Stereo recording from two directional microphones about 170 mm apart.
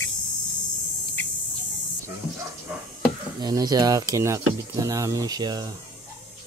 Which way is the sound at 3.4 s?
20° right (ahead or behind).